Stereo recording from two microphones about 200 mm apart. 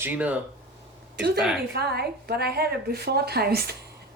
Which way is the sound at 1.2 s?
55° right (ahead or behind).